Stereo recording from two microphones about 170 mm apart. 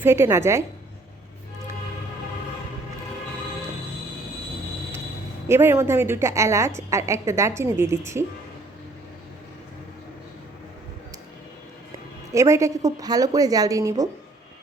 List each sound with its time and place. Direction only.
0.0 s a woman's voice: 15° right (ahead or behind)
5.5 s a woman's voice: 15° right (ahead or behind)
12.3 s a woman's voice: 20° right (ahead or behind)